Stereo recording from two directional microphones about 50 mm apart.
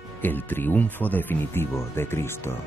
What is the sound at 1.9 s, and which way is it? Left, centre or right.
Speech, left.